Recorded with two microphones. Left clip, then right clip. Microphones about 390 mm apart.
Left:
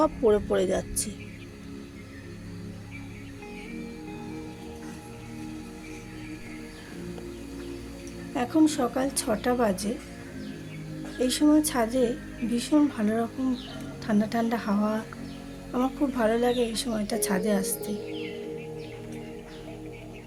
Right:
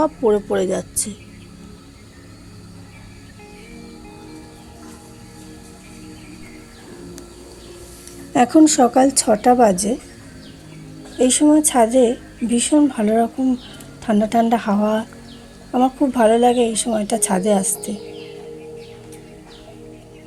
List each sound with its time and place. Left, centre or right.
0.0 s a woman's voice: left
8.3 s a woman's voice: left
11.2 s a woman's voice: left